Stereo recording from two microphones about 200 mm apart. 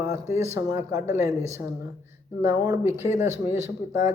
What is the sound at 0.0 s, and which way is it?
Speech, 15° right (ahead or behind).